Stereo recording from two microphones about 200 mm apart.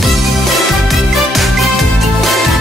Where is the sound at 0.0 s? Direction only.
Centre (ahead or behind).